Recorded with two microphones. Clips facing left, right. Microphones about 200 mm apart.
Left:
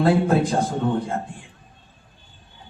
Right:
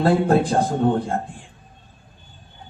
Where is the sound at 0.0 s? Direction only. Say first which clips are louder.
Right 1 dB; 55° right (ahead or behind).